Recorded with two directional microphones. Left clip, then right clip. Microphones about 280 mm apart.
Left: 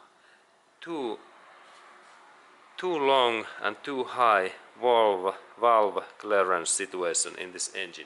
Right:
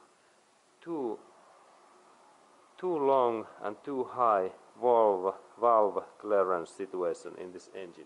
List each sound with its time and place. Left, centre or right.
0.9 s speech: right
2.8 s speech: centre